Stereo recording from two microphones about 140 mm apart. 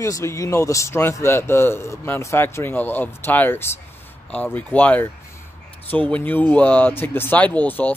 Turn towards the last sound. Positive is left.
turn(degrees=15)  # may be behind; listen again after turning